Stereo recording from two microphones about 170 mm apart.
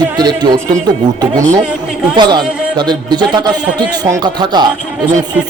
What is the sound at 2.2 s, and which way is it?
Speech, 25° right (ahead or behind).